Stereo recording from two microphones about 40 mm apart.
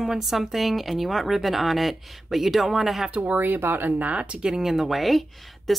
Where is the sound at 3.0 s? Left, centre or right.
Right.